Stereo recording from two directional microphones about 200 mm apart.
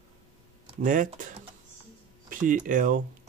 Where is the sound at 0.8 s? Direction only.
40° right (ahead or behind).